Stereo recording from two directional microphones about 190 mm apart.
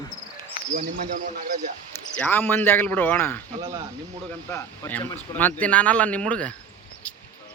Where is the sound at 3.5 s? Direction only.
20° right (ahead or behind).